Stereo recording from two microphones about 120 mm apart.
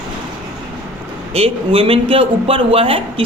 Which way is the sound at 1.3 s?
50° right (ahead or behind).